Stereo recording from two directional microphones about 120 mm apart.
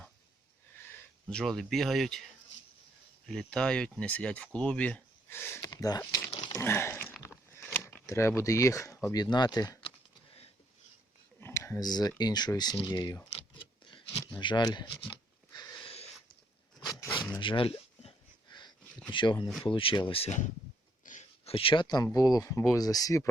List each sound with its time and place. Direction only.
1.3 s speech: 5° left (ahead or behind)
3.2 s speech: 5° left (ahead or behind); by 6.3 s 25° left (ahead or behind)
6.6 s a sound: 20° left (ahead or behind)
7.5 s speech: 20° left (ahead or behind)
11.3 s speech: 20° left (ahead or behind)
13.3 s a sound: 45° left (ahead or behind)
14.3 s speech: 40° left (ahead or behind)
15.8 s a sound: 55° left (ahead or behind)
16.8 s vehicle: 35° left (ahead or behind)
17.4 s speech: 45° left (ahead or behind)
18.5 s a sound: 40° left (ahead or behind)
19.1 s speech: 40° left (ahead or behind)
21.0 s dog: 85° left
21.5 s speech: 50° left (ahead or behind); by 23.3 s 30° left (ahead or behind)